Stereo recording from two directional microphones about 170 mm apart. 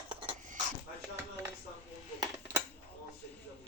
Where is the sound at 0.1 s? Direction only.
30° right (ahead or behind).